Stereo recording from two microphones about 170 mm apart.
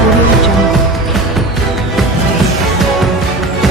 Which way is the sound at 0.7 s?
Centre (ahead or behind).